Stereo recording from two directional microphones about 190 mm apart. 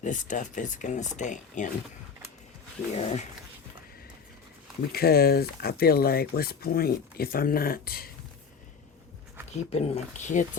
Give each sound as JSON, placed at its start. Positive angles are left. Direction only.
{"t": 0.0, "sound": "speech", "side_deg": 40}
{"t": 2.9, "sound": "speech", "side_deg": 35}
{"t": 4.9, "sound": "speech", "side_deg": 55}
{"t": 9.5, "sound": "speech", "side_deg": 35}